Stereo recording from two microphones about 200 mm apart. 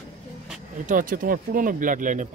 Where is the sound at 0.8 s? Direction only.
45° right (ahead or behind).